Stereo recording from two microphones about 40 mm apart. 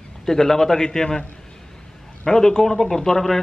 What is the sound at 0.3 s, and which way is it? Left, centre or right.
Speech, centre.